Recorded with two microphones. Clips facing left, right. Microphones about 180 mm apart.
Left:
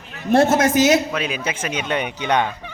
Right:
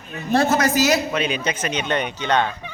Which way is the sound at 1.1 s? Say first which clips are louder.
Right 1 dB; 5° left (ahead or behind).